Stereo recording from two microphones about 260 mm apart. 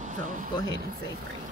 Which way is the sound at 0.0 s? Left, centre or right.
Right.